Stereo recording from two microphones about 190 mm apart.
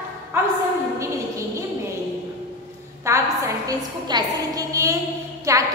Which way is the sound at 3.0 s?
15° right (ahead or behind).